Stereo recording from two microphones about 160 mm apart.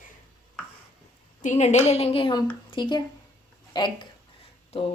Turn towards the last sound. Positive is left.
turn(degrees=40)  # may be behind; listen again after turning